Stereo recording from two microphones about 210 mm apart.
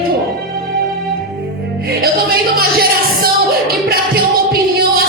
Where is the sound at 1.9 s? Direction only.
45° right (ahead or behind).